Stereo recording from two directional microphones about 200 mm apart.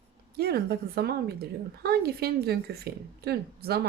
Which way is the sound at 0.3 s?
55° right (ahead or behind).